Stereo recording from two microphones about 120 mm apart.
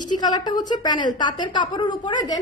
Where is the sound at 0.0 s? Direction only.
35° left (ahead or behind).